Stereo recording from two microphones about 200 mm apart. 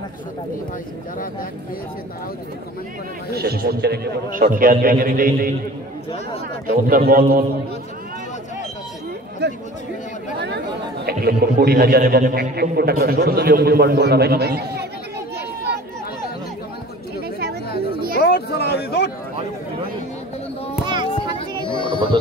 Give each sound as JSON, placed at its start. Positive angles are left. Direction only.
{"t": 3.3, "sound": "a man's voice", "side_deg": -50}
{"t": 6.9, "sound": "a man's voice", "side_deg": -45}
{"t": 9.4, "sound": "speech", "side_deg": -55}
{"t": 11.1, "sound": "a man's voice", "side_deg": -50}
{"t": 15.3, "sound": "chatter", "side_deg": -55}
{"t": 18.2, "sound": "a sound", "side_deg": 55}
{"t": 20.8, "sound": "children playing", "side_deg": -20}
{"t": 21.6, "sound": "music", "side_deg": 25}